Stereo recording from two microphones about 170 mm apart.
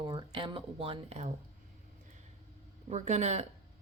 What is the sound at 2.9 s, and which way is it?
Speech, 40° right (ahead or behind).